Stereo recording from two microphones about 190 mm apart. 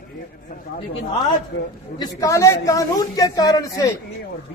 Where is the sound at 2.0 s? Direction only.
15° left (ahead or behind).